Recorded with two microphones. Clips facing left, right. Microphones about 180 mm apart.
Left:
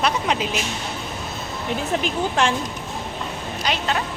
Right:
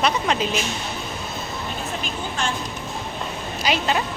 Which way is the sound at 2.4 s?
90° left.